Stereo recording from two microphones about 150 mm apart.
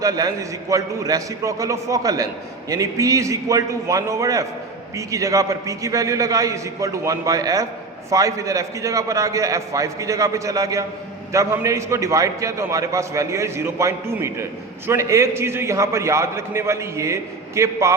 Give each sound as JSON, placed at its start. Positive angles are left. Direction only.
{"t": 0.0, "sound": "a man's voice", "side_deg": -25}